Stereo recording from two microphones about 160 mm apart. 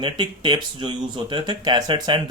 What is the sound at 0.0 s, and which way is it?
Speech, 30° right (ahead or behind).